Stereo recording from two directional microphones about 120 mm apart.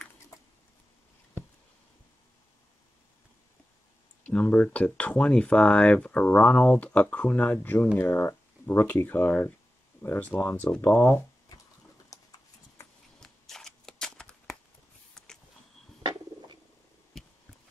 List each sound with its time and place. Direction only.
4.2 s speech: 10° left (ahead or behind)
12.1 s horse: 30° left (ahead or behind)
13.2 s shuffling cards: 5° left (ahead or behind)
15.2 s a sound: 5° left (ahead or behind)